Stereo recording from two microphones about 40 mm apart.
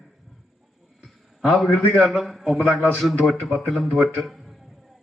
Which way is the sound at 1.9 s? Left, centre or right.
Centre.